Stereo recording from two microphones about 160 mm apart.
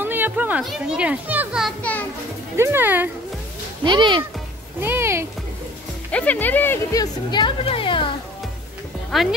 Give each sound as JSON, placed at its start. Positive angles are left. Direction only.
{"t": 0.0, "sound": "a child's voice", "side_deg": -10}
{"t": 1.8, "sound": "a child's voice", "side_deg": 10}
{"t": 2.5, "sound": "speech", "side_deg": -15}
{"t": 3.8, "sound": "speech", "side_deg": -30}
{"t": 4.7, "sound": "speech", "side_deg": -15}
{"t": 6.1, "sound": "speech", "side_deg": 10}
{"t": 9.1, "sound": "speech", "side_deg": 0}